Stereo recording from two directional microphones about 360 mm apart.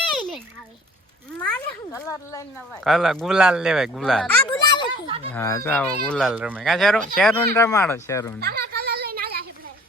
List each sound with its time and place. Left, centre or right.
1.4 s cat: centre
2.8 s speech: centre
4.4 s a sound: centre
5.0 s speech: centre
5.3 s speech: centre
8.4 s a sound: right